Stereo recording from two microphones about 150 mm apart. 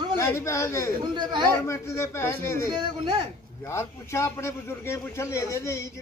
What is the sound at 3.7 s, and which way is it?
Speech, 20° left (ahead or behind).